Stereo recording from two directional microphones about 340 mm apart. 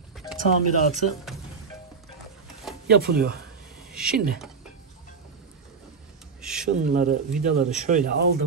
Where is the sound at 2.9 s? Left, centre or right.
Right.